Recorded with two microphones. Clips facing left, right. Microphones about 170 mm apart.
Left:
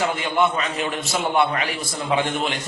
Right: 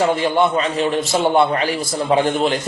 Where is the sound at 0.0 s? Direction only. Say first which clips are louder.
Right 5 dB; 35° right (ahead or behind).